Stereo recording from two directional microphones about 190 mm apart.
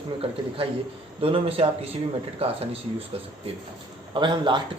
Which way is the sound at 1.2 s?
30° right (ahead or behind).